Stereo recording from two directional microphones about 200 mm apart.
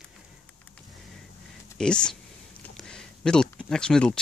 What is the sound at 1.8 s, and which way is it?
Speech, 5° left (ahead or behind).